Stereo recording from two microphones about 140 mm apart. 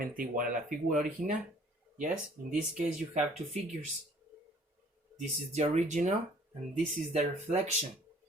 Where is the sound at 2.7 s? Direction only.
55° right (ahead or behind).